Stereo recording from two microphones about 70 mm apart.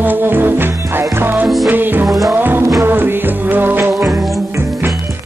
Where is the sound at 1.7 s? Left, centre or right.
Right.